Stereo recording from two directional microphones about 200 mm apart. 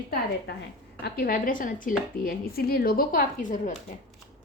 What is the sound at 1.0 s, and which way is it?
Speech, 50° left (ahead or behind).